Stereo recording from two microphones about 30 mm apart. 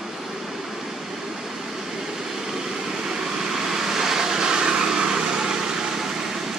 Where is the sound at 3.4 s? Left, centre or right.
Centre.